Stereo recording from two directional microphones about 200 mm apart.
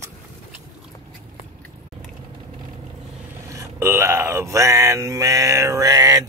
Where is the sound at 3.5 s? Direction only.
15° right (ahead or behind).